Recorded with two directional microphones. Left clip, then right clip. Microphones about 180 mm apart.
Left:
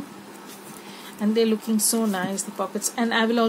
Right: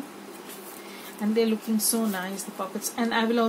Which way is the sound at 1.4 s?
55° left (ahead or behind).